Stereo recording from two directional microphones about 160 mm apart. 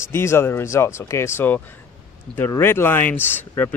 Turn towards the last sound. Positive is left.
turn(degrees=10)  # may be behind; listen again after turning